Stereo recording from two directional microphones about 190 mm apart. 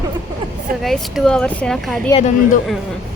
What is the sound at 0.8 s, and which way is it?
Speech, centre (ahead or behind).